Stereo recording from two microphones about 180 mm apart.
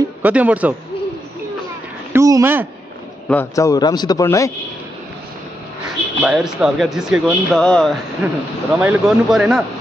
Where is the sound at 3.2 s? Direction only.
10° left (ahead or behind).